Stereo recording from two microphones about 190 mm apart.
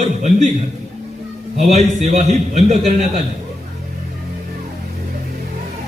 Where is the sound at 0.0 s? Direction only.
35° right (ahead or behind).